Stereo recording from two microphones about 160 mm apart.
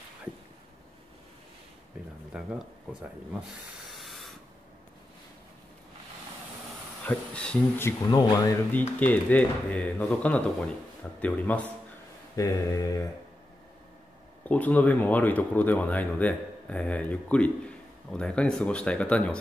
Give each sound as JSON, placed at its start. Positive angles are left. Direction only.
{"t": 2.3, "sound": "speech", "side_deg": -5}
{"t": 3.7, "sound": "a sound", "side_deg": 0}
{"t": 7.1, "sound": "speech", "side_deg": 10}
{"t": 8.1, "sound": "mantra", "side_deg": 20}
{"t": 8.7, "sound": "speech", "side_deg": 10}
{"t": 12.4, "sound": "mantra", "side_deg": 20}
{"t": 14.5, "sound": "speech", "side_deg": 10}